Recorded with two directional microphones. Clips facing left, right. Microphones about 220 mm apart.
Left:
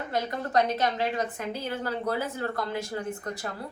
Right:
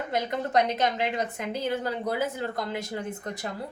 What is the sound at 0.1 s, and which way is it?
A woman's voice, 20° right (ahead or behind).